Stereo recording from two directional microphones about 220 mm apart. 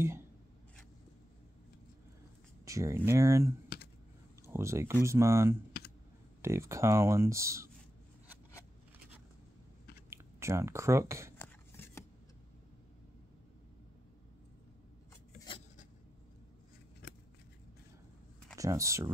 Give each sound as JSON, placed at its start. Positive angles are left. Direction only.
{"t": 2.6, "sound": "a sound", "side_deg": -15}
{"t": 3.1, "sound": "speech", "side_deg": -15}
{"t": 3.6, "sound": "computer keyboard", "side_deg": 45}
{"t": 4.5, "sound": "speech", "side_deg": -10}
{"t": 10.0, "sound": "speech", "side_deg": -10}
{"t": 11.3, "sound": "a sound", "side_deg": 10}
{"t": 18.6, "sound": "speech", "side_deg": -15}